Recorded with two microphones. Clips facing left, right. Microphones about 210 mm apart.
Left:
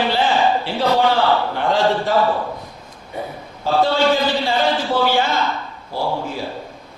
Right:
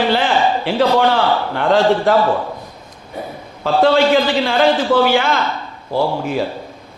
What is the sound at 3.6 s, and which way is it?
A man's voice, 75° right (ahead or behind).